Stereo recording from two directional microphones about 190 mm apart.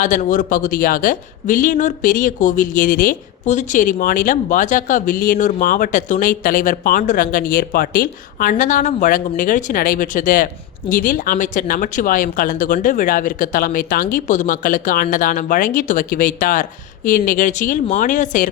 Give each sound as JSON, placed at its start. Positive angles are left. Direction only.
{"t": 0.0, "sound": "speech", "side_deg": 40}